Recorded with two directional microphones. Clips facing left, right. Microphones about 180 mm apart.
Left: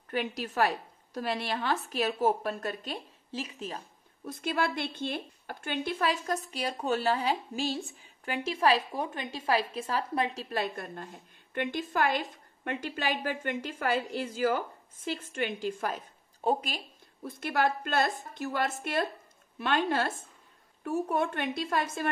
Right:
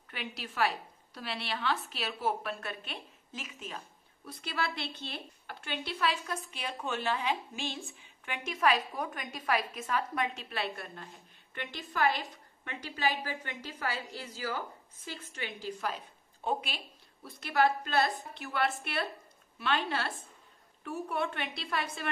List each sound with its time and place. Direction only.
0.1 s a woman's voice: 45° left (ahead or behind)